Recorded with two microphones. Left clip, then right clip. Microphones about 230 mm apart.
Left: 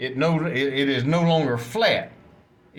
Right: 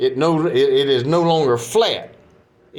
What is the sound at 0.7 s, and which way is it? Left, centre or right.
A man's voice, right.